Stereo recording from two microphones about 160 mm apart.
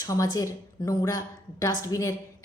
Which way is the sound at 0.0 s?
20° left (ahead or behind).